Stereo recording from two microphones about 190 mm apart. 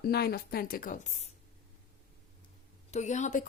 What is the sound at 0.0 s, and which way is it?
A woman's voice, 55° left (ahead or behind).